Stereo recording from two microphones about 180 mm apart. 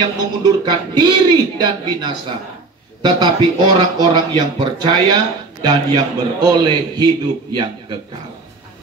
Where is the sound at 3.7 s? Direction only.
25° right (ahead or behind).